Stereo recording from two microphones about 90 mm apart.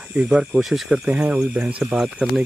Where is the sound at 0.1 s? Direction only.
10° right (ahead or behind).